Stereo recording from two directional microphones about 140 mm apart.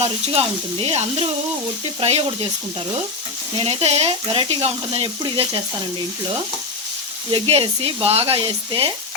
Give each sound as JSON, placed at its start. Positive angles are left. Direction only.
{"t": 0.0, "sound": "speech", "side_deg": -45}
{"t": 3.6, "sound": "speech", "side_deg": -45}
{"t": 7.3, "sound": "speech", "side_deg": -40}